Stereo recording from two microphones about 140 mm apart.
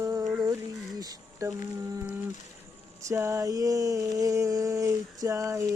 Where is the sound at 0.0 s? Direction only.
25° right (ahead or behind).